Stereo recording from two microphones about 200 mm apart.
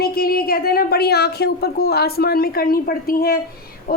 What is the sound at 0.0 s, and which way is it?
A woman's voice, 50° left (ahead or behind).